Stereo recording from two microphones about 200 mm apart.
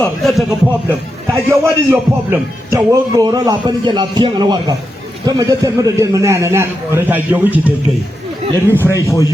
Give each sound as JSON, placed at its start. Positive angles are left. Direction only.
{"t": 0.0, "sound": "speech", "side_deg": 0}
{"t": 0.9, "sound": "a man's voice", "side_deg": -15}
{"t": 8.7, "sound": "speech", "side_deg": 15}